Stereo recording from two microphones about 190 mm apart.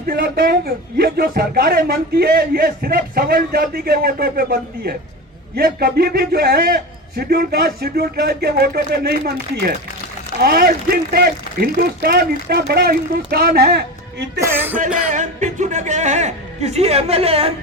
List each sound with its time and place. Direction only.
0.1 s a man's voice: 55° right (ahead or behind)
14.4 s speech: 10° right (ahead or behind)
14.8 s music: 5° right (ahead or behind)
15.1 s speech: 40° right (ahead or behind)